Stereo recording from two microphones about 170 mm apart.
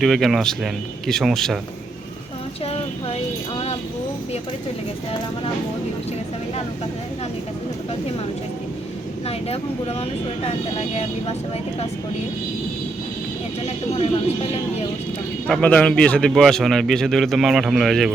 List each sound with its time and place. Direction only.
0.0 s a man's voice: centre (ahead or behind)
2.6 s vehicle: 35° left (ahead or behind)
10.0 s speech: 35° left (ahead or behind)
15.4 s a man's voice: 5° left (ahead or behind)